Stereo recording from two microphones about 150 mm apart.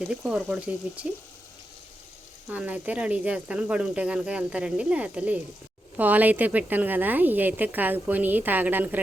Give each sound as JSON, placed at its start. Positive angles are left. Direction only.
{"t": 0.0, "sound": "speech", "side_deg": -5}
{"t": 2.5, "sound": "a woman's voice", "side_deg": -10}